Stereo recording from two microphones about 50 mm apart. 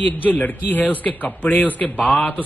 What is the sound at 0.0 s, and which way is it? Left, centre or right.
A man's voice, left.